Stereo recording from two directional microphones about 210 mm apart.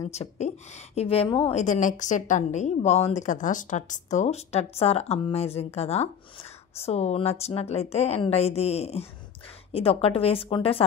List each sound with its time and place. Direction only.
0.1 s a woman's voice: 30° left (ahead or behind)